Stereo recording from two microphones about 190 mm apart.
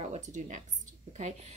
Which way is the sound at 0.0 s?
40° right (ahead or behind).